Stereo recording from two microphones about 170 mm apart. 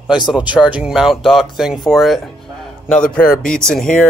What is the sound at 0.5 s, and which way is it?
Speech, 5° right (ahead or behind).